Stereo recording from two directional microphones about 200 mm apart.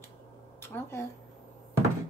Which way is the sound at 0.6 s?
10° left (ahead or behind).